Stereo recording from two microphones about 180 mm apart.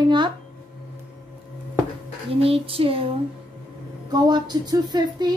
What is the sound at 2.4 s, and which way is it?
Speech, 30° right (ahead or behind).